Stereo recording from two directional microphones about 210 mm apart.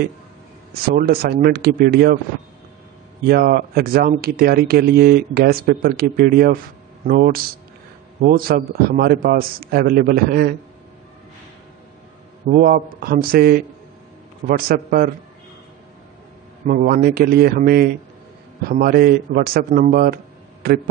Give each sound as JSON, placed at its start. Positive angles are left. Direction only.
{"t": 0.8, "sound": "speech", "side_deg": -45}
{"t": 3.3, "sound": "speech", "side_deg": -45}
{"t": 12.4, "sound": "speech", "side_deg": -40}
{"t": 14.7, "sound": "speech", "side_deg": -45}
{"t": 16.6, "sound": "speech", "side_deg": -40}